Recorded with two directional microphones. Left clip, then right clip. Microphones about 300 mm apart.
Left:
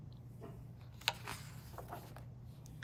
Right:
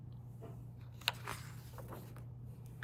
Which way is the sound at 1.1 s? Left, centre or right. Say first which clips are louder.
Even; centre.